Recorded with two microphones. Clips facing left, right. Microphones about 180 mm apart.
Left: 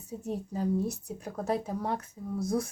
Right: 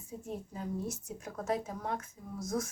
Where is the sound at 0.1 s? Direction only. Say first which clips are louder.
Left 6 dB; 40° left (ahead or behind).